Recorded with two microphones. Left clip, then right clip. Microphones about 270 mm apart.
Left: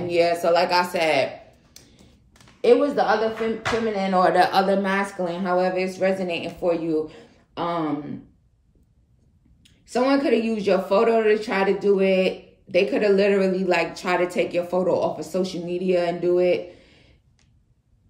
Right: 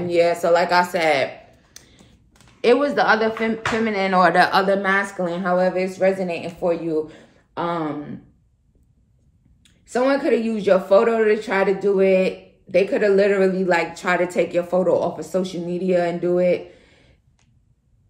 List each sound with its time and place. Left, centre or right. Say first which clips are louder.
0.1 s a man's voice: right 2 dB; right
9.6 s speech: right 2 dB; centre